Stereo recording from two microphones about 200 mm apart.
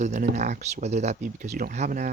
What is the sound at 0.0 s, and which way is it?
Speech, 35° right (ahead or behind).